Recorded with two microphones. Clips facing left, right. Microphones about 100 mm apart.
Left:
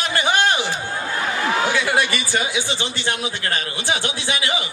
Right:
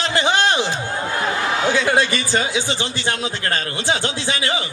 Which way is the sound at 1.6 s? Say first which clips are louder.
Right 2 dB; 15° left (ahead or behind).